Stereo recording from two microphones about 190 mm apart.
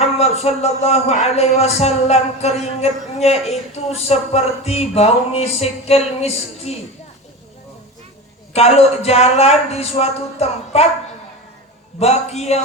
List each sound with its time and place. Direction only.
0.0 s a man's voice: 35° left (ahead or behind)
8.5 s a man's voice: 35° left (ahead or behind)
11.9 s a man's voice: 35° left (ahead or behind)